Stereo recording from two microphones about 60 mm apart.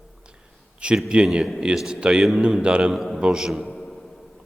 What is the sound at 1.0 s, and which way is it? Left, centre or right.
Speech, centre.